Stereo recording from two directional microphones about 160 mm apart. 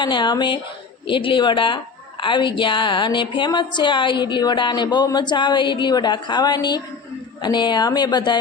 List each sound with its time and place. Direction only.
0.0 s a woman's voice: 30° left (ahead or behind)